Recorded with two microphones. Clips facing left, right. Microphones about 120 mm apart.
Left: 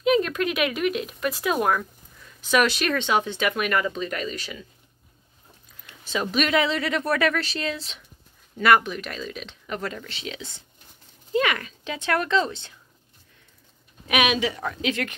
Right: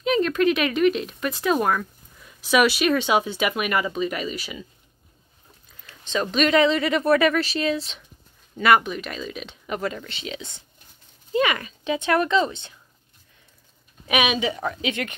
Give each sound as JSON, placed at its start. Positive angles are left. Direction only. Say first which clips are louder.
{"t": 0.0, "sound": "speech", "louder": "right 1 dB", "side_deg": 5}
{"t": 5.9, "sound": "speech", "louder": "right 2 dB", "side_deg": 5}
{"t": 14.0, "sound": "speech", "louder": "even", "side_deg": 0}